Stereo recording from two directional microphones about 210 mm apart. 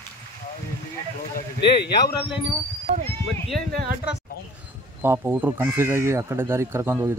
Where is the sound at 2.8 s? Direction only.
30° right (ahead or behind).